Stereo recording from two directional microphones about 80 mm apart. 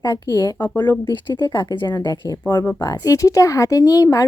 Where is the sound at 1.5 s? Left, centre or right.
Left.